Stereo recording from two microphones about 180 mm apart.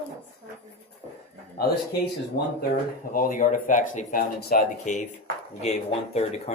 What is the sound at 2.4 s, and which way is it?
Speech, 65° left (ahead or behind).